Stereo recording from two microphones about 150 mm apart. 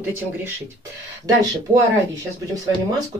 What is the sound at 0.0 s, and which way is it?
Speech, 15° right (ahead or behind).